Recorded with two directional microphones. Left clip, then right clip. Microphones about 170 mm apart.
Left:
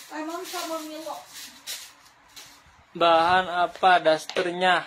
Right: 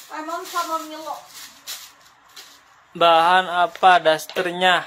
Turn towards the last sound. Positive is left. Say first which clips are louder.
# right 4 dB
turn(degrees=-10)  # may be behind; listen again after turning